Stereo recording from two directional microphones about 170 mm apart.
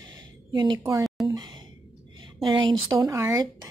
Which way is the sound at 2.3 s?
30° right (ahead or behind).